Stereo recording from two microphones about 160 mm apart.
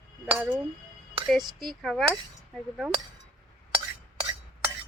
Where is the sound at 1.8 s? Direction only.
Centre (ahead or behind).